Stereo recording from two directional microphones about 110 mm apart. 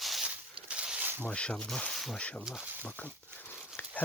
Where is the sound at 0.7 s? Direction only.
10° right (ahead or behind).